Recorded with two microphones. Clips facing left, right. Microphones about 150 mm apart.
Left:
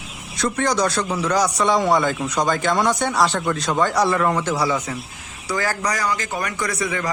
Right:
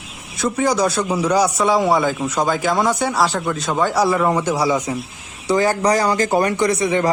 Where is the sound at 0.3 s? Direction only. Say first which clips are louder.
Right 3 dB; 5° right (ahead or behind).